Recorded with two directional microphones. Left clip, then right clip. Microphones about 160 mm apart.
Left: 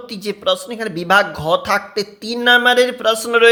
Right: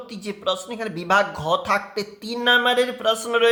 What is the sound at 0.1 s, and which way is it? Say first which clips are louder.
A man's voice: left 7 dB; 35° left (ahead or behind).